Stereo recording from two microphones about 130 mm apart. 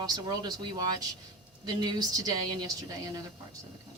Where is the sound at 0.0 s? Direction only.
30° right (ahead or behind).